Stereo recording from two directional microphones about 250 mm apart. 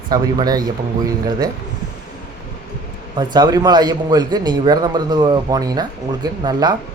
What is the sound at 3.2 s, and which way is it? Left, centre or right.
A man's voice, centre.